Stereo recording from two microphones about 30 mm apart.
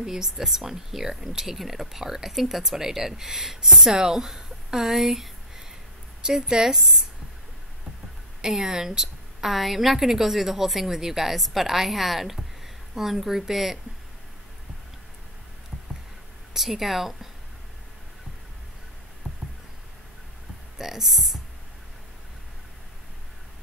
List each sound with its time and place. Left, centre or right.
0.0 s speech: centre
6.2 s a woman's voice: right
8.4 s a woman's voice: centre
9.5 s speech: centre
16.5 s speech: centre
19.2 s a sound: right
20.7 s speech: centre